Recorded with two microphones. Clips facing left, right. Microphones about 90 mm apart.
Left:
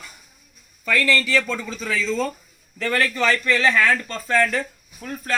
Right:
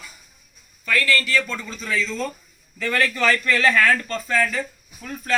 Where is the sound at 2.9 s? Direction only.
30° left (ahead or behind).